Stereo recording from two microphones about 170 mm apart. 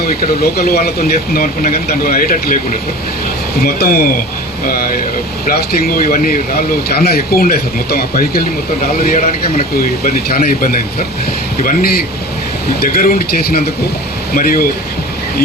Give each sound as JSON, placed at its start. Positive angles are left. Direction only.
{"t": 0.2, "sound": "speech", "side_deg": 65}
{"t": 3.6, "sound": "speech", "side_deg": 60}